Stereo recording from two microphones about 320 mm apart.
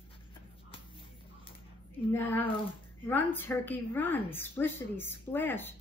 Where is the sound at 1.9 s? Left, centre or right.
Centre.